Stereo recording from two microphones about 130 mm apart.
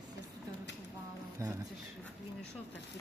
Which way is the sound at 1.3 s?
25° right (ahead or behind).